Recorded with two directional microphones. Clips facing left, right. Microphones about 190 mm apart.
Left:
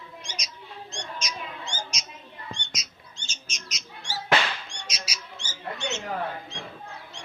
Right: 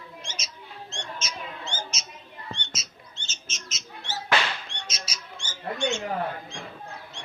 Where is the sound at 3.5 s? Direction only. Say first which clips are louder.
Right 1 dB; 15° left (ahead or behind).